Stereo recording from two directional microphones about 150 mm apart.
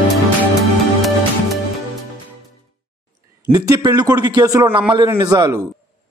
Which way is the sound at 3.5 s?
25° right (ahead or behind).